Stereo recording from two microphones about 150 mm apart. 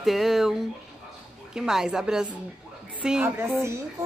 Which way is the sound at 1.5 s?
5° right (ahead or behind).